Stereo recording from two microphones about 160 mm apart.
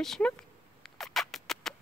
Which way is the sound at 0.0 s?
5° left (ahead or behind).